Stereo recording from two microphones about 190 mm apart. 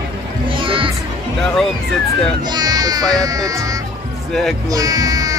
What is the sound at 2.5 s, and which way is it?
Speech, 20° right (ahead or behind).